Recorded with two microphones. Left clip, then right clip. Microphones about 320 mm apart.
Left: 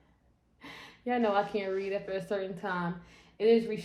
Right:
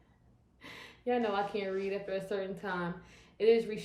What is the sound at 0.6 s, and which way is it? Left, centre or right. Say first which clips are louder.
A woman's voice: left 2 dB; centre.